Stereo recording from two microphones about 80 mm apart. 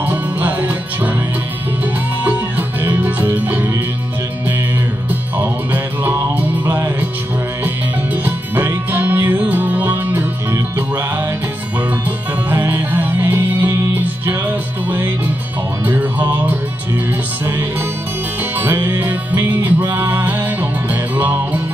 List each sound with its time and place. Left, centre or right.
0.0 s music: right
2.2 s music: right
5.4 s music: right
8.3 s music: right
12.4 s music: right
18.6 s music: right